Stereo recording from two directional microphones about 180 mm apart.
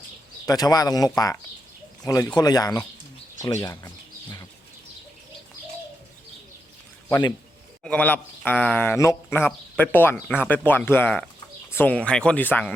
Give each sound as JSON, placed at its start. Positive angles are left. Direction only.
{"t": 0.4, "sound": "speech", "side_deg": 20}
{"t": 3.4, "sound": "bird", "side_deg": 20}
{"t": 7.1, "sound": "speech", "side_deg": 25}
{"t": 7.9, "sound": "speech", "side_deg": 10}